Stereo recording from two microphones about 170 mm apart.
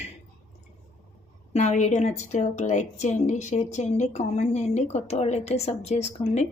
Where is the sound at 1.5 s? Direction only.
40° left (ahead or behind).